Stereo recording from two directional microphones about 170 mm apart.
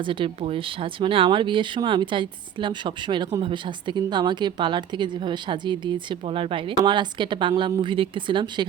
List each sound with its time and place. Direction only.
0.0 s speech: 30° right (ahead or behind)